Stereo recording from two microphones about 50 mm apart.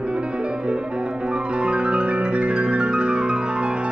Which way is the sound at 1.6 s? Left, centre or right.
Right.